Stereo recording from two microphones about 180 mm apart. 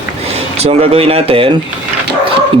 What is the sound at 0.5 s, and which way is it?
Speech, 35° right (ahead or behind).